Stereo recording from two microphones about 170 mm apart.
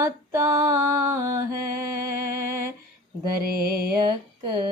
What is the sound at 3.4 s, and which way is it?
Music, 65° right (ahead or behind).